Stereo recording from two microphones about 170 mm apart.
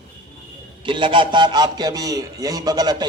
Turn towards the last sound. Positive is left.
turn(degrees=-25)  # may be behind; listen again after turning